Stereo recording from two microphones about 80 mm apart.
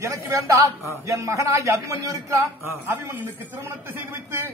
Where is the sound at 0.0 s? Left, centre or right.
Right.